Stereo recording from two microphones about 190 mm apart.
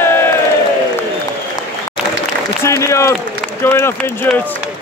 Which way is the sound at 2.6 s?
15° left (ahead or behind).